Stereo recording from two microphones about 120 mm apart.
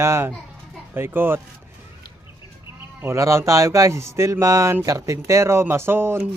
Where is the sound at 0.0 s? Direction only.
25° right (ahead or behind).